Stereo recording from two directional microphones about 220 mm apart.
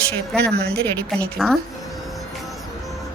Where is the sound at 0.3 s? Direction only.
50° right (ahead or behind).